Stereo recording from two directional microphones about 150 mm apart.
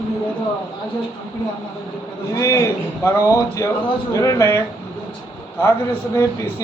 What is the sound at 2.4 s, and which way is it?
Speech, 20° left (ahead or behind).